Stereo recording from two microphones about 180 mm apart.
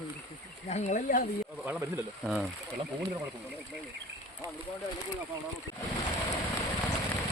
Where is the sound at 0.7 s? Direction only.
40° left (ahead or behind).